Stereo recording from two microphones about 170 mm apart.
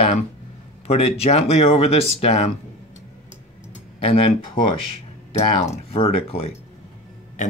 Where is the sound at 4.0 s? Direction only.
35° left (ahead or behind).